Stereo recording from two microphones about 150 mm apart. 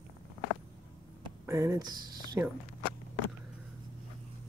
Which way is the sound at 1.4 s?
20° right (ahead or behind).